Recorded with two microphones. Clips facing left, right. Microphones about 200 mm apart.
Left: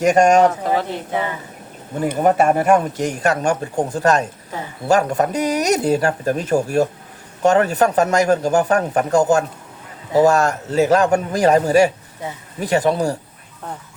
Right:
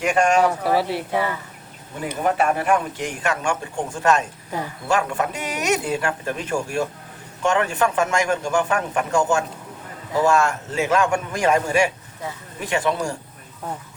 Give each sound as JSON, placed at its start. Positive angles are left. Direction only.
{"t": 0.0, "sound": "speech", "side_deg": 40}
{"t": 0.8, "sound": "speech", "side_deg": -10}
{"t": 1.1, "sound": "speech", "side_deg": 20}
{"t": 2.0, "sound": "speech", "side_deg": 40}